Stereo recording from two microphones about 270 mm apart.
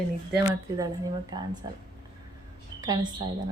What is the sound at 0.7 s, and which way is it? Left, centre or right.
Speech, centre.